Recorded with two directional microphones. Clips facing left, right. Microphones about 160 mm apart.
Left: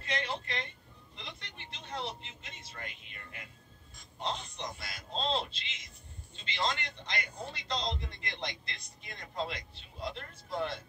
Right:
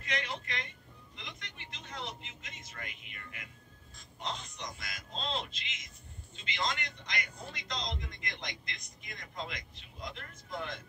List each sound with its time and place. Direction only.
0.0 s speech: 30° left (ahead or behind)
1.1 s vehicle: 30° left (ahead or behind)
4.2 s a sound: 30° left (ahead or behind)